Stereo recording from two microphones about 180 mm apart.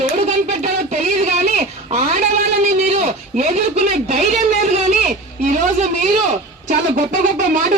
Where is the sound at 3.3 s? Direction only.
40° right (ahead or behind).